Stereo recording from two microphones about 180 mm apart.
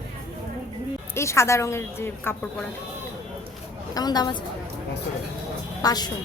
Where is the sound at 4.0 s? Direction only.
20° left (ahead or behind).